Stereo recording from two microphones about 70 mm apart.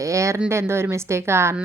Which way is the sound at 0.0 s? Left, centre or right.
Right.